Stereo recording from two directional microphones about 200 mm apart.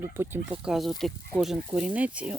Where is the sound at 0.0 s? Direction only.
10° right (ahead or behind).